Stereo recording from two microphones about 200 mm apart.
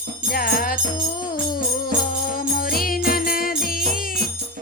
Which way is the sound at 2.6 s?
45° left (ahead or behind).